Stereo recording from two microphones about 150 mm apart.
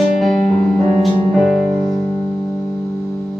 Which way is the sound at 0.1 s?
Centre (ahead or behind).